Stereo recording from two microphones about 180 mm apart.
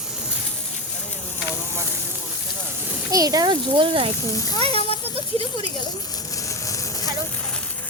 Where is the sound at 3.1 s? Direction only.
20° right (ahead or behind).